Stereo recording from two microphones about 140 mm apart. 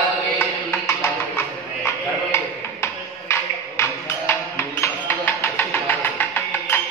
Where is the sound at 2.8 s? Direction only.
20° left (ahead or behind).